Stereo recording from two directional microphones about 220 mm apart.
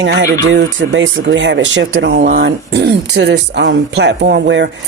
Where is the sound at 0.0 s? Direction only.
55° right (ahead or behind).